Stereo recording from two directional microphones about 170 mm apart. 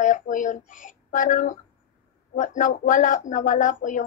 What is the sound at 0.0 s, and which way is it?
A child's voice, 50° left (ahead or behind).